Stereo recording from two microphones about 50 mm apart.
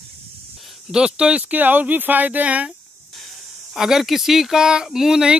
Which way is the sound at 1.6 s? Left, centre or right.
Right.